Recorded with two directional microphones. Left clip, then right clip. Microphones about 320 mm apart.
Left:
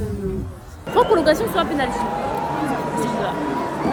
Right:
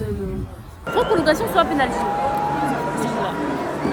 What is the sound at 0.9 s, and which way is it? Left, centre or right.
Chatter, centre.